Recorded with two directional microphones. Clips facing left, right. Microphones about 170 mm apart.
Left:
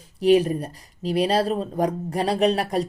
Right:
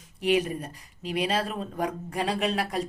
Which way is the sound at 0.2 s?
35° left (ahead or behind).